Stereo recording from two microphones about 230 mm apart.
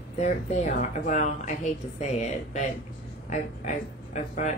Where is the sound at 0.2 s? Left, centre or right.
Left.